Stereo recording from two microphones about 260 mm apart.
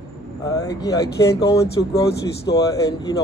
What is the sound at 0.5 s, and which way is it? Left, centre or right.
Speech, centre.